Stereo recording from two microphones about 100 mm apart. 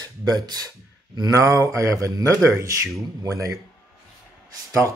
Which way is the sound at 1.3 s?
30° right (ahead or behind).